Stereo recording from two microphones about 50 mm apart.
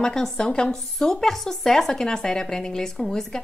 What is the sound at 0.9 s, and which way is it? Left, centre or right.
A woman's voice, centre.